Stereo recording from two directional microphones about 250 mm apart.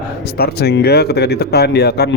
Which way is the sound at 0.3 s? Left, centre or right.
Left.